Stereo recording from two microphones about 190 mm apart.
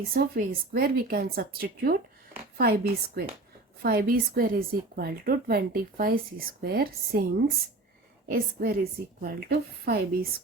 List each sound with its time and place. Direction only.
0.1 s a woman's voice: 55° right (ahead or behind)
8.3 s speech: 50° right (ahead or behind)